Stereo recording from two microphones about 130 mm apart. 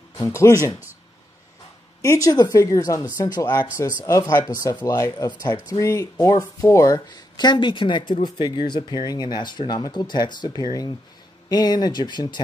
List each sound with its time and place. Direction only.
0.2 s a woman's voice: 25° left (ahead or behind)
2.0 s a woman's voice: 30° left (ahead or behind)